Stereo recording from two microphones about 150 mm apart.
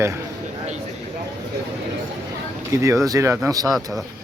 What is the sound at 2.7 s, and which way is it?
Speech, 20° right (ahead or behind).